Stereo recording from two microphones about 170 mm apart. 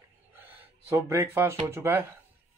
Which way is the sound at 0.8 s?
15° right (ahead or behind).